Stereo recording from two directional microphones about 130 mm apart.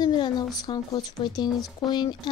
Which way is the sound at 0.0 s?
35° left (ahead or behind).